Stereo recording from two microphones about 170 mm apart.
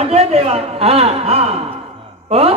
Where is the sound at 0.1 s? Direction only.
35° right (ahead or behind).